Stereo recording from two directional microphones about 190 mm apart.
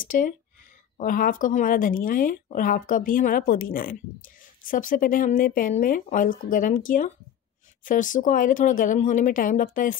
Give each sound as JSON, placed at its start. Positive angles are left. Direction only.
{"t": 0.0, "sound": "speech", "side_deg": 45}